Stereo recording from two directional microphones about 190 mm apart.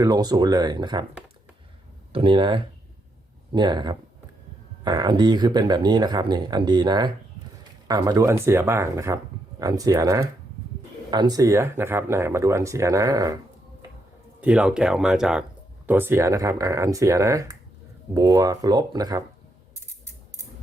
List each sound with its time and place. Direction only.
0.0 s speech: 20° right (ahead or behind)
2.1 s speech: 25° right (ahead or behind)
14.4 s speech: 5° right (ahead or behind); by 19.2 s 20° right (ahead or behind)